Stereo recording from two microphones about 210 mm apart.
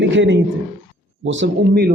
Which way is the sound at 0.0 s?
60° right (ahead or behind).